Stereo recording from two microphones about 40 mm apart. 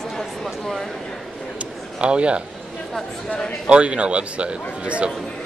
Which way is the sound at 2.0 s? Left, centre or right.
Right.